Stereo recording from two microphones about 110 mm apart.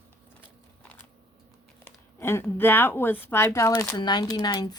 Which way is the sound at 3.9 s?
40° left (ahead or behind).